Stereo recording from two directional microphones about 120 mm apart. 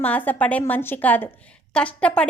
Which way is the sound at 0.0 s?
15° left (ahead or behind).